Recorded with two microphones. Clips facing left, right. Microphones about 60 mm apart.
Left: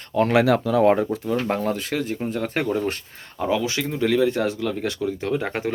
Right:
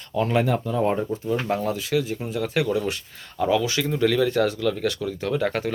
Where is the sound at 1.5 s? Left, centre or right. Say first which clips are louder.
Left 1 dB; left.